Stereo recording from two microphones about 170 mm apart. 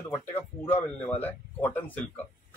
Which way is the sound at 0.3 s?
10° left (ahead or behind).